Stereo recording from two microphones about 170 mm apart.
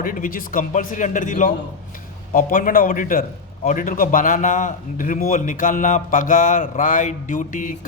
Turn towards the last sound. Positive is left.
turn(degrees=50)  # may be behind; listen again after turning